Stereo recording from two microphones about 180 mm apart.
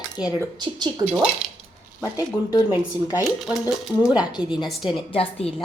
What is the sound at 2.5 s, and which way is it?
Speech, 20° left (ahead or behind).